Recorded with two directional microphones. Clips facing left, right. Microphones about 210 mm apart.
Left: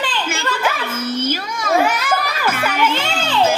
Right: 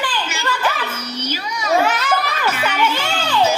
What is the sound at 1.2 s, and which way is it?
Children playing, 50° left (ahead or behind).